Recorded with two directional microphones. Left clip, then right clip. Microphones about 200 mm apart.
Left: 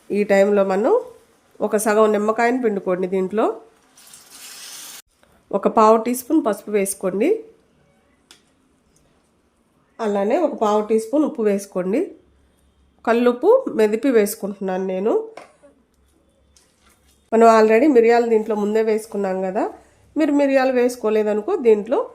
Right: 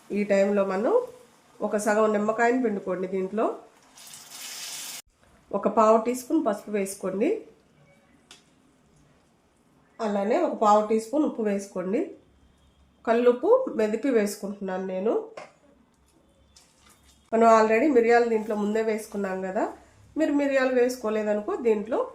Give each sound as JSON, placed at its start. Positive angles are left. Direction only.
{"t": 0.1, "sound": "speech", "side_deg": 60}
{"t": 5.5, "sound": "speech", "side_deg": 55}
{"t": 10.0, "sound": "speech", "side_deg": 60}
{"t": 17.2, "sound": "speech", "side_deg": 50}